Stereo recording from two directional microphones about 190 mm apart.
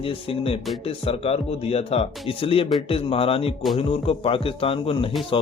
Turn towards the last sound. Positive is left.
turn(degrees=30)  # may be behind; listen again after turning